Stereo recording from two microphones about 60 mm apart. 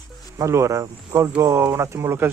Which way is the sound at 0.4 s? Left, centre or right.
Right.